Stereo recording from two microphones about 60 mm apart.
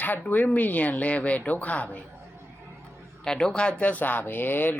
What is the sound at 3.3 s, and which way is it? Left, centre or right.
A woman's voice, centre.